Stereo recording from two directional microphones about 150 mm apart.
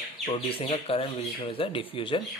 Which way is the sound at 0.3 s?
35° left (ahead or behind).